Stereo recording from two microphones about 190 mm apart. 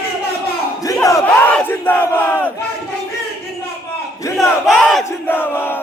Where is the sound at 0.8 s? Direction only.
15° left (ahead or behind).